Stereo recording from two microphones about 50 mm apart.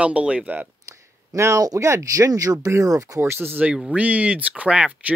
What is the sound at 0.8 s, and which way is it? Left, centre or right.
Speech, right.